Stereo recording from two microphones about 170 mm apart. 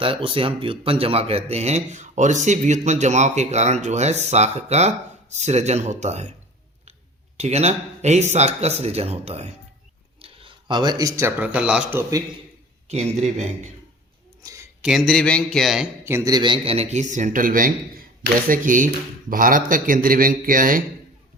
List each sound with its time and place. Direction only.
0.0 s speech: 30° right (ahead or behind)
7.3 s speech: 40° right (ahead or behind); by 12.2 s 15° right (ahead or behind)
13.1 s a man's voice: 40° right (ahead or behind)
14.4 s a sound: 15° right (ahead or behind)
14.8 s speech: centre (ahead or behind)
16.0 s speech: 15° right (ahead or behind); by 20.8 s 55° right (ahead or behind)